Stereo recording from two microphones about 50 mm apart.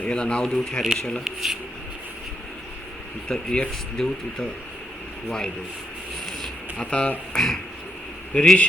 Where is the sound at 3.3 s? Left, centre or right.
Centre.